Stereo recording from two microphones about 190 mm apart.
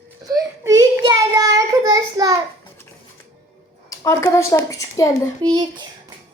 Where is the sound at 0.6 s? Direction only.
15° right (ahead or behind).